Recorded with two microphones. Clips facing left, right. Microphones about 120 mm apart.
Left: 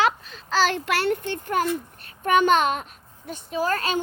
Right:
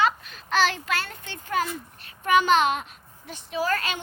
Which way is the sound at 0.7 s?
65° left (ahead or behind).